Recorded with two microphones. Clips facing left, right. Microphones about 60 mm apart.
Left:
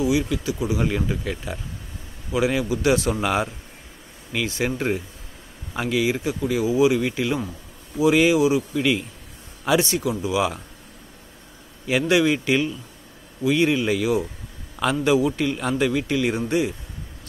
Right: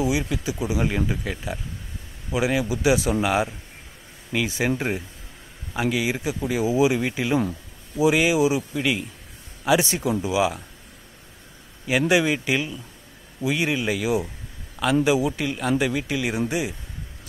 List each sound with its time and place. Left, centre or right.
0.0 s speech: centre
0.8 s speech: centre
8.7 s speech: centre
12.1 s speech: centre